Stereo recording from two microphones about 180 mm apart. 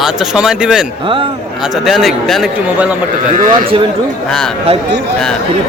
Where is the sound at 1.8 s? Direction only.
Centre (ahead or behind).